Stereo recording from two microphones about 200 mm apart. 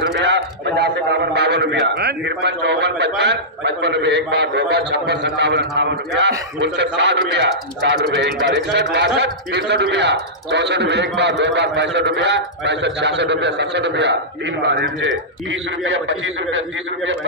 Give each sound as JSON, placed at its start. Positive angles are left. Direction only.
{"t": 0.0, "sound": "a man's voice", "side_deg": -60}
{"t": 16.1, "sound": "a man's voice", "side_deg": -70}